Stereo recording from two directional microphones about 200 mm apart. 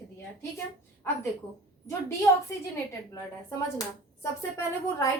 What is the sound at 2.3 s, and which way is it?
Speech, 15° left (ahead or behind).